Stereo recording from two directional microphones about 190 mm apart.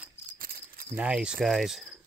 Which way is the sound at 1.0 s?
5° right (ahead or behind).